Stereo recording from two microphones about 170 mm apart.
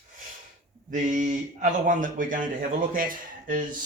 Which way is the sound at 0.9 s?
45° right (ahead or behind).